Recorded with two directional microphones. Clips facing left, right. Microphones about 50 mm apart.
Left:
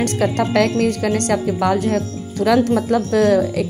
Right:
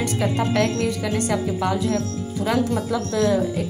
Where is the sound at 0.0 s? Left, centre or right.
Left.